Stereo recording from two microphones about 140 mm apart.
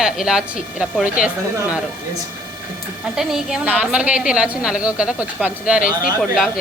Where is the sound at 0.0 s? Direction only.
5° right (ahead or behind).